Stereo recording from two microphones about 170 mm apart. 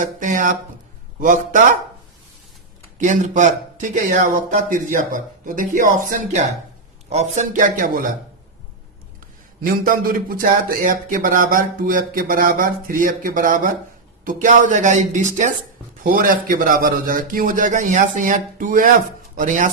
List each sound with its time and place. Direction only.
0.0 s speech: 50° right (ahead or behind)
3.0 s speech: 45° right (ahead or behind)
9.6 s speech: 55° right (ahead or behind)